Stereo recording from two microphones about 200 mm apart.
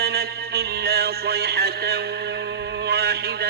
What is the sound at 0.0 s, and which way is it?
Music, 50° right (ahead or behind).